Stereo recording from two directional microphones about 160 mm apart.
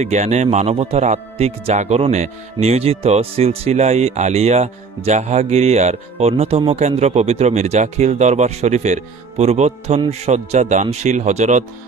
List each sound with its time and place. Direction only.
0.0 s speech: 45° right (ahead or behind)